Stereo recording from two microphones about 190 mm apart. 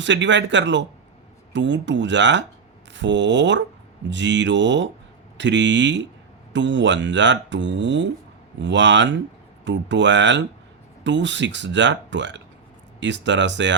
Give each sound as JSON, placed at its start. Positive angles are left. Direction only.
{"t": 0.0, "sound": "speech", "side_deg": -70}